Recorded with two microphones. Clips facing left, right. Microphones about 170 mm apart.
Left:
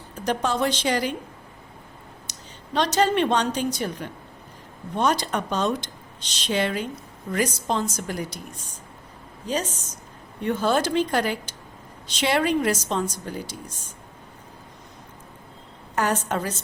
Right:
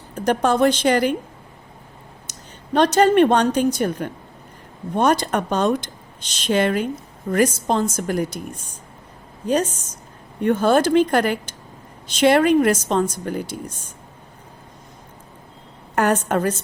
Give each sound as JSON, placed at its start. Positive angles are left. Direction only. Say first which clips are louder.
{"t": 0.3, "sound": "speech", "louder": "right 7 dB", "side_deg": -55}
{"t": 2.3, "sound": "a sound", "louder": "right 2 dB", "side_deg": -50}
{"t": 2.7, "sound": "speech", "louder": "right 7 dB", "side_deg": -55}
{"t": 10.4, "sound": "speech", "louder": "right 6 dB", "side_deg": -50}
{"t": 16.0, "sound": "a woman's voice", "louder": "right 6 dB", "side_deg": -55}